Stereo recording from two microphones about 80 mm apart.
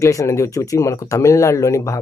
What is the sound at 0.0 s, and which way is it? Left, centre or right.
Speech, left.